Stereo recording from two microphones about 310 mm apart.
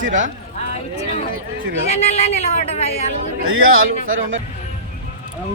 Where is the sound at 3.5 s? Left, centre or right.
Right.